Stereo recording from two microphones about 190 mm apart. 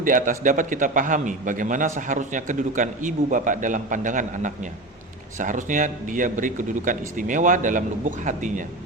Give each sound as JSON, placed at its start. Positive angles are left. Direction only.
{"t": 0.0, "sound": "a man's voice", "side_deg": -45}